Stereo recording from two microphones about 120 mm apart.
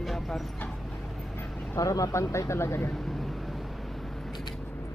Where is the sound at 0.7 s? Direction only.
Centre (ahead or behind).